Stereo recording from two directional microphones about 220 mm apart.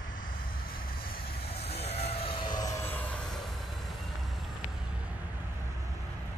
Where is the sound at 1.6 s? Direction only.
30° left (ahead or behind); by 3.2 s 10° left (ahead or behind).